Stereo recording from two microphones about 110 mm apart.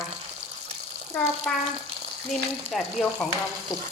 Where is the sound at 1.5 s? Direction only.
10° left (ahead or behind).